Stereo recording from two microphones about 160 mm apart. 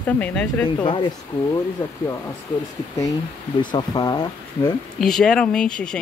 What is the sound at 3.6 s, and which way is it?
Speech, 30° left (ahead or behind).